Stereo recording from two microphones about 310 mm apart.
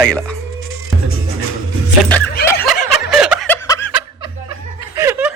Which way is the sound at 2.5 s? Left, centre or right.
Centre.